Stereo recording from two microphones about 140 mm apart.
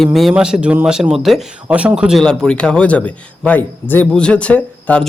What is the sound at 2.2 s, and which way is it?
Speech, 5° left (ahead or behind).